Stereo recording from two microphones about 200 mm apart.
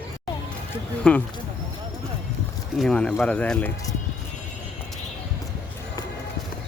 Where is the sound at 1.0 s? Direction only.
5° left (ahead or behind).